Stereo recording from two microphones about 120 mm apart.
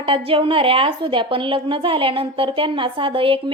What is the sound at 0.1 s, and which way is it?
A woman's voice, 50° right (ahead or behind).